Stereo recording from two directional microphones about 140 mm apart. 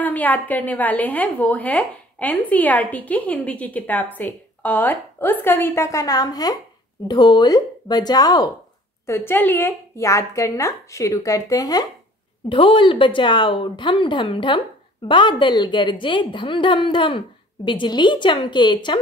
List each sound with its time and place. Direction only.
0.0 s a woman's voice: 10° left (ahead or behind); by 8.5 s 25° left (ahead or behind)
9.0 s a woman's voice: 15° left (ahead or behind)
12.4 s speech: 40° left (ahead or behind)